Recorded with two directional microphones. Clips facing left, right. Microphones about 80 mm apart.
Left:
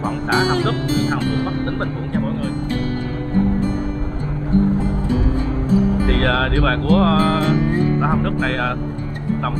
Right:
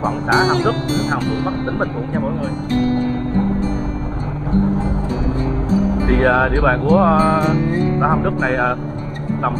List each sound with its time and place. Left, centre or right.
0.0 s speech: centre
6.0 s speech: centre